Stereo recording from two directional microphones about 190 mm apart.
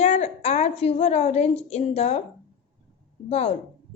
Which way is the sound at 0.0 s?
35° left (ahead or behind).